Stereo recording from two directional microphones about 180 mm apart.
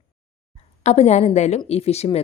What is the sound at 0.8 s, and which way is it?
A woman's voice, 40° left (ahead or behind).